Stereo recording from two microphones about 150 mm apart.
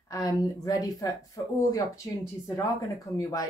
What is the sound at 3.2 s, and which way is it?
Speech, 25° left (ahead or behind).